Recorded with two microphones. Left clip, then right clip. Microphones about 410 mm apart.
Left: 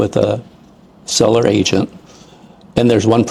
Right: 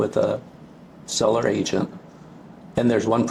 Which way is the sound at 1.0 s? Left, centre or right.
Left.